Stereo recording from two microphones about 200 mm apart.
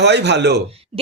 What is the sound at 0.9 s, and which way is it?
Speech, 30° right (ahead or behind).